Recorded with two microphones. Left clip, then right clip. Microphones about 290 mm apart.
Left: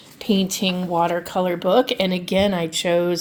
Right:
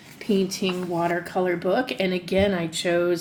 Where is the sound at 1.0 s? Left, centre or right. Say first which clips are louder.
Left 4 dB; left.